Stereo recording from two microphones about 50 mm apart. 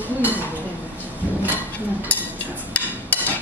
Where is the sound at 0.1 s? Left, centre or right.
Right.